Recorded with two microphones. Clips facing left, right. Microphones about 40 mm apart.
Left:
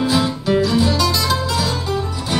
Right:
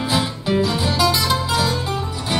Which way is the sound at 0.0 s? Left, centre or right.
Centre.